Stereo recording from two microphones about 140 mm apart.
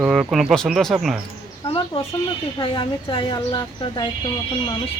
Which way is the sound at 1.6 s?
35° left (ahead or behind).